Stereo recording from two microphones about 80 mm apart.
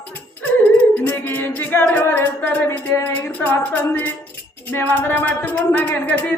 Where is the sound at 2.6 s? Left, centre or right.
Left.